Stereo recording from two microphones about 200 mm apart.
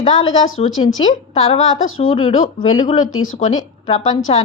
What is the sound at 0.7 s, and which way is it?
Speech, 85° left.